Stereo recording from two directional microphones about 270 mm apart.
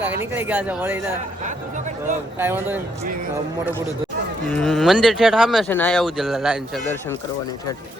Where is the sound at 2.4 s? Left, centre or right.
Centre.